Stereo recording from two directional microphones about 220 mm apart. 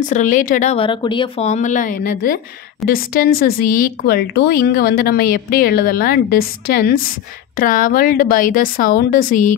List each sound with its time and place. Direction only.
0.1 s speech: 35° left (ahead or behind)